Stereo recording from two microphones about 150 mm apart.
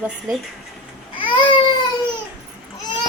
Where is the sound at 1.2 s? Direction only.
35° left (ahead or behind).